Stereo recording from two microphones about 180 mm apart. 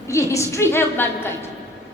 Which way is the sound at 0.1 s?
15° left (ahead or behind).